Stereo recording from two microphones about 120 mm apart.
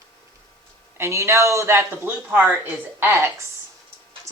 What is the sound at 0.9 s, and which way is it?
A woman's voice, 25° right (ahead or behind).